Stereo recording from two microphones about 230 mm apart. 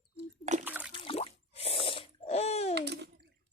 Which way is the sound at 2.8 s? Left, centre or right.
Right.